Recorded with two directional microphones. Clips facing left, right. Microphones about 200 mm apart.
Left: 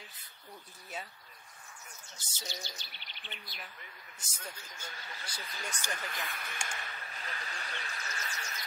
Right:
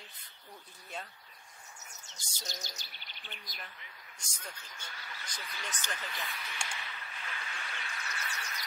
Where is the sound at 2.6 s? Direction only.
40° right (ahead or behind).